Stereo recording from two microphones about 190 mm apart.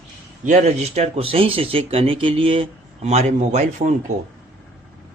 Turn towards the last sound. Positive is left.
turn(degrees=-35)  # may be behind; listen again after turning